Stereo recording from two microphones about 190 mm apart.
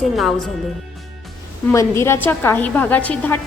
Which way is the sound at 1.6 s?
15° left (ahead or behind).